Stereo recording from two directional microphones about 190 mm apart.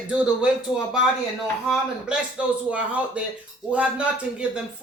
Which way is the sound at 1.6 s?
Centre (ahead or behind).